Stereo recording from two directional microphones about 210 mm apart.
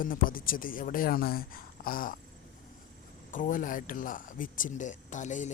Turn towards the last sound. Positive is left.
turn(degrees=35)  # may be behind; listen again after turning